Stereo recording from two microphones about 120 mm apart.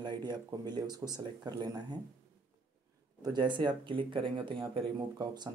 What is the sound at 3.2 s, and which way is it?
Speech, 40° right (ahead or behind).